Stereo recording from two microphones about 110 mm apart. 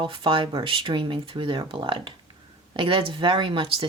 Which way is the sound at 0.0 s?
50° right (ahead or behind).